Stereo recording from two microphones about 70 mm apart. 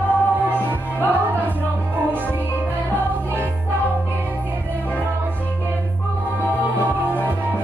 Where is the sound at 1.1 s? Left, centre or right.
Right.